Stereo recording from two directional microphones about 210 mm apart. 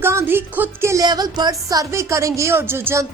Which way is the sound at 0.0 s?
10° right (ahead or behind).